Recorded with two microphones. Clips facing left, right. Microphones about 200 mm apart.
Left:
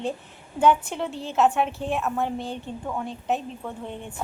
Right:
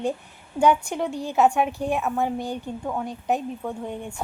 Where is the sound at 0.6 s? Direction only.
Centre (ahead or behind).